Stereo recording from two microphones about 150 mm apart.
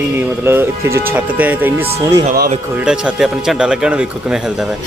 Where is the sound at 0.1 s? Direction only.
15° right (ahead or behind).